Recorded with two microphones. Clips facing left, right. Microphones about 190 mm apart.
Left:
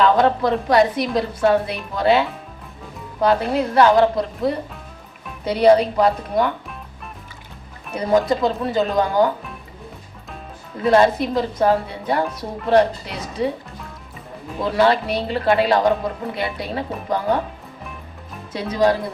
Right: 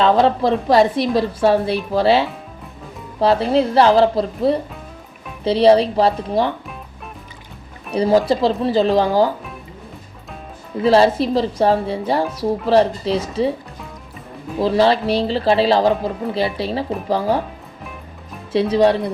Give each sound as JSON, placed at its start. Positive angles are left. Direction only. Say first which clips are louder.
{"t": 0.0, "sound": "a woman's voice", "louder": "right 2 dB", "side_deg": -25}
{"t": 7.9, "sound": "a woman's voice", "louder": "right 3 dB", "side_deg": -30}
{"t": 10.8, "sound": "a woman's voice", "louder": "right 2 dB", "side_deg": -30}
{"t": 14.6, "sound": "a woman's voice", "louder": "right 2 dB", "side_deg": -30}
{"t": 18.5, "sound": "a woman's voice", "louder": "right 4 dB", "side_deg": -30}